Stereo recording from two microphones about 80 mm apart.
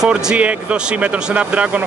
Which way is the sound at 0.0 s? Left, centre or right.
Centre.